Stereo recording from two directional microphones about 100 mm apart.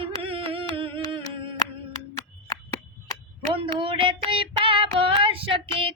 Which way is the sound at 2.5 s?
35° left (ahead or behind).